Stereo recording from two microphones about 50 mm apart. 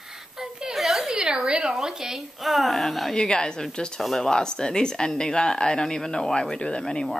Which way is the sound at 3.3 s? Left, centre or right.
Centre.